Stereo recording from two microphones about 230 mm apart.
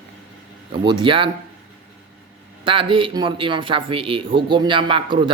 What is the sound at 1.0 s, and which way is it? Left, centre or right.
Speech, right.